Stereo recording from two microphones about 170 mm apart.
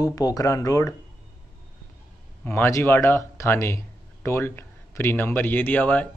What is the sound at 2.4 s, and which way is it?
Speech, 15° left (ahead or behind).